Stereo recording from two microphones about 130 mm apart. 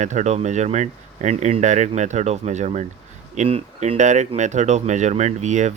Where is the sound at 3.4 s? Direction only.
50° right (ahead or behind).